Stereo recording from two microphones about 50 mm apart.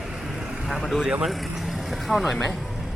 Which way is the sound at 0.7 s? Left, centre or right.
Centre.